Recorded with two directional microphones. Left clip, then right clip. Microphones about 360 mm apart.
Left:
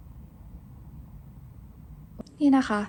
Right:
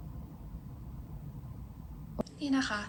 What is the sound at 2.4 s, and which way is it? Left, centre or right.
Speech, centre.